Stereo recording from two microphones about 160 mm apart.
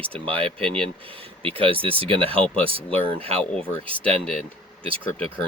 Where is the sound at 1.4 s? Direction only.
35° right (ahead or behind).